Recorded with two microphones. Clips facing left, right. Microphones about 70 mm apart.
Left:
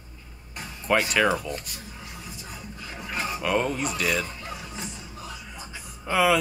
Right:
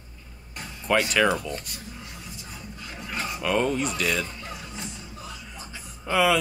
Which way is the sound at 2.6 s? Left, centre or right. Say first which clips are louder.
Even; centre.